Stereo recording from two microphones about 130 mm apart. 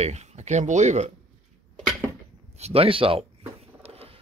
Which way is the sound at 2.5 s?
50° right (ahead or behind).